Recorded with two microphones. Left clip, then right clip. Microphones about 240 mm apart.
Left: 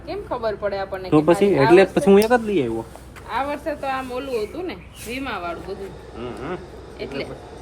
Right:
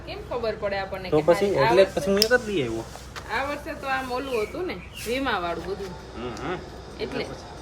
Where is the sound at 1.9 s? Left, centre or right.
Centre.